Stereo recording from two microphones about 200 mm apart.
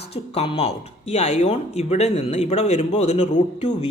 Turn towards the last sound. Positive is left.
turn(degrees=30)  # may be behind; listen again after turning